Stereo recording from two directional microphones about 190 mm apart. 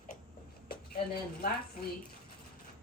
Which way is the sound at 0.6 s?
55° left (ahead or behind).